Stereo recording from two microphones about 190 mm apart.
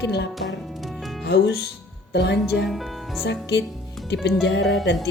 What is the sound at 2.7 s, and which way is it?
Speech, centre (ahead or behind).